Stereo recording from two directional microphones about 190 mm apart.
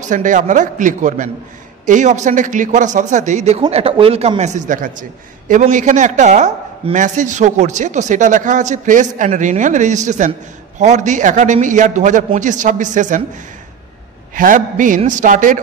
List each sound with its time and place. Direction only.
0.1 s a man's voice: 40° right (ahead or behind)
14.3 s a man's voice: 45° right (ahead or behind)